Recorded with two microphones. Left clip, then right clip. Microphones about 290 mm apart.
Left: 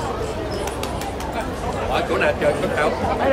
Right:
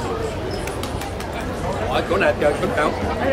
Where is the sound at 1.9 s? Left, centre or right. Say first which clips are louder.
Right 1 dB; centre.